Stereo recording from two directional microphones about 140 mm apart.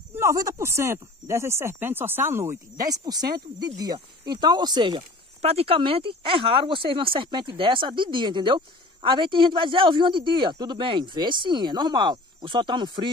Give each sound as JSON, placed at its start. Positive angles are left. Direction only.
{"t": 0.1, "sound": "speech", "side_deg": -20}
{"t": 5.4, "sound": "speech", "side_deg": -45}